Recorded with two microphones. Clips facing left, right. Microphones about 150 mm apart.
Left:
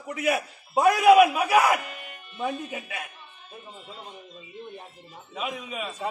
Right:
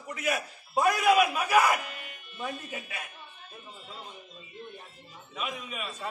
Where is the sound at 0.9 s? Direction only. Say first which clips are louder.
Left 8 dB; 70° left (ahead or behind).